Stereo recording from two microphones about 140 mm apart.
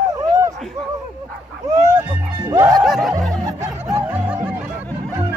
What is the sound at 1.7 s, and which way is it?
Music, 60° right (ahead or behind).